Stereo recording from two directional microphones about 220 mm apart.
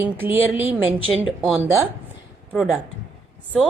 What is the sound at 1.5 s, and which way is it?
Speech, 10° right (ahead or behind).